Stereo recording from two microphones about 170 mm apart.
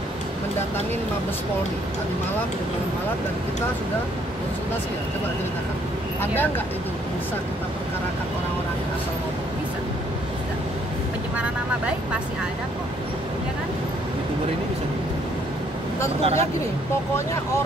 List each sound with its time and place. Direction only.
16.2 s speech: 35° right (ahead or behind)